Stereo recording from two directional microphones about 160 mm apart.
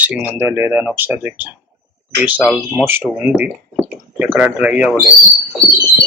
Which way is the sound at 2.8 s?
10° right (ahead or behind).